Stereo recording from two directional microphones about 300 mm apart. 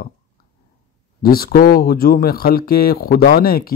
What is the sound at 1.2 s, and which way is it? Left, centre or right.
Speech, left.